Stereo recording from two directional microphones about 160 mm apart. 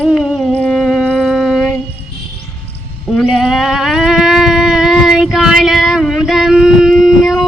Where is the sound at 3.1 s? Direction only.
Centre (ahead or behind).